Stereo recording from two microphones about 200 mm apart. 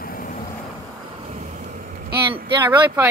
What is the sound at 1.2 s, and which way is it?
Vehicle, 35° right (ahead or behind).